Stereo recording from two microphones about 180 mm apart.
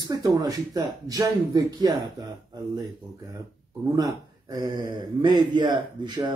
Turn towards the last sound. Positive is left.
turn(degrees=-25)  # may be behind; listen again after turning